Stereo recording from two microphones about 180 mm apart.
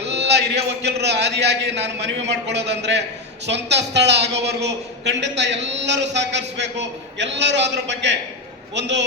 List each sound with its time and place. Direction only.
0.1 s a woman's voice: 70° right (ahead or behind)